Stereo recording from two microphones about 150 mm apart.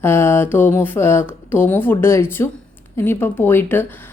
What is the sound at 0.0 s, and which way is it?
A woman's voice, 15° left (ahead or behind).